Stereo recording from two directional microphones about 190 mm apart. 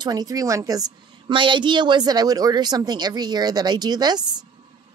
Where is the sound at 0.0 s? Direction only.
20° right (ahead or behind).